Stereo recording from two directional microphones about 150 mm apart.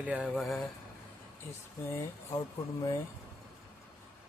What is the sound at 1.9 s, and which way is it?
Speech, 20° left (ahead or behind).